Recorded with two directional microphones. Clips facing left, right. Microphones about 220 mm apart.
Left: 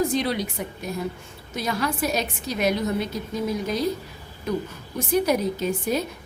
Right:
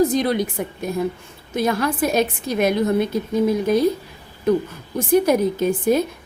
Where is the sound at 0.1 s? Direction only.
50° right (ahead or behind).